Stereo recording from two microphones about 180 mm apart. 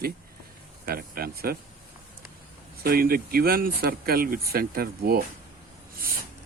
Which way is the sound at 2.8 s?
55° right (ahead or behind).